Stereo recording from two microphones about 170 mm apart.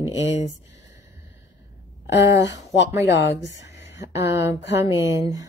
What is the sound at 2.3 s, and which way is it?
Speech, 20° right (ahead or behind).